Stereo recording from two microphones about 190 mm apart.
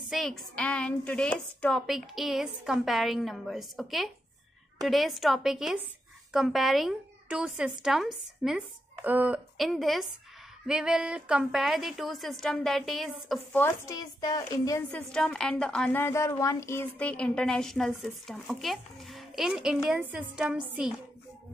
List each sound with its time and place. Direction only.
0.1 s a woman's voice: centre (ahead or behind)
13.6 s speech: 15° left (ahead or behind)
14.8 s a woman's voice: 5° left (ahead or behind)